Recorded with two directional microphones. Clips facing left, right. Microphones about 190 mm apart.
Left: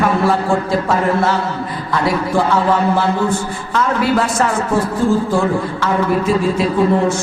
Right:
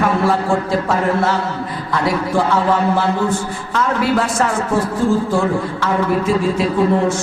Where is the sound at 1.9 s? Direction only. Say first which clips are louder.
Left 1 dB; 15° left (ahead or behind).